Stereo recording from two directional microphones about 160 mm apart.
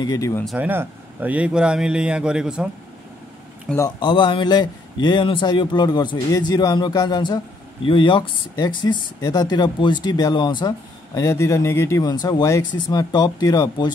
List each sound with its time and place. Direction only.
0.0 s a man's voice: 20° left (ahead or behind)
0.5 s speech: 10° right (ahead or behind)
3.6 s speech: 15° left (ahead or behind)
4.0 s a man's voice: 30° left (ahead or behind)